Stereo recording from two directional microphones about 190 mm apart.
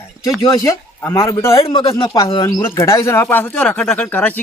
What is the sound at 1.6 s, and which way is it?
Speech, 25° left (ahead or behind).